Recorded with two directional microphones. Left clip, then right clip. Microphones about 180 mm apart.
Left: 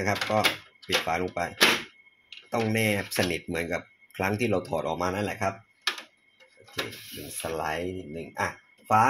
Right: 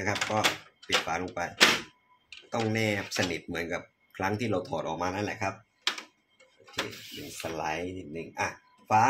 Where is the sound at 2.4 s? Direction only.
45° left (ahead or behind).